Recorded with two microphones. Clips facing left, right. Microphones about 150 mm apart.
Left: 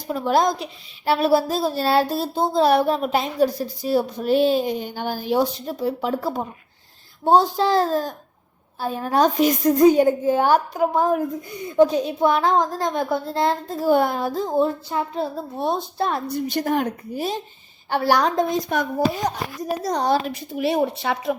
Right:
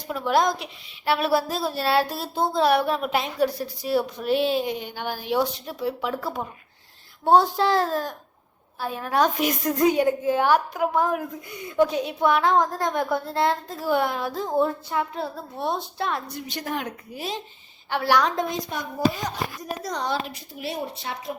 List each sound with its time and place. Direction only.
0.1 s a child's voice: 35° left (ahead or behind)
18.7 s speech: 55° left (ahead or behind)
19.8 s a child's voice: 35° left (ahead or behind)
20.5 s speech: 65° left (ahead or behind)